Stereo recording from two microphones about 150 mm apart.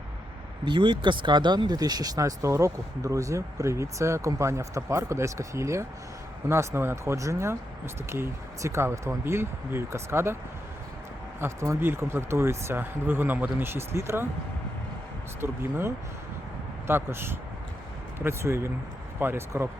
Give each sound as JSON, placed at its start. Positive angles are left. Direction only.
{"t": 0.6, "sound": "speech", "side_deg": -30}
{"t": 11.3, "sound": "speech", "side_deg": -20}
{"t": 15.4, "sound": "speech", "side_deg": -15}